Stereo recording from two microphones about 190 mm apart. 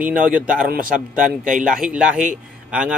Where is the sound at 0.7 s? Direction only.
45° right (ahead or behind).